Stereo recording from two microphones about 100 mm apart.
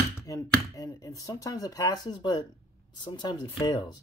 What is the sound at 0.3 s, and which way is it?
Speech, 35° left (ahead or behind).